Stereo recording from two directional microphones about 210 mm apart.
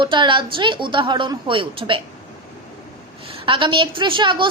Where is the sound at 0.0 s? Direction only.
20° right (ahead or behind).